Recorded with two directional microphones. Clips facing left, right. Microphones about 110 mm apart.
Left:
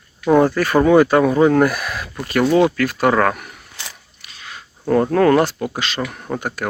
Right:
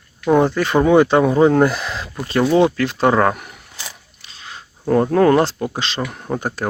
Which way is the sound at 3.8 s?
30° right (ahead or behind).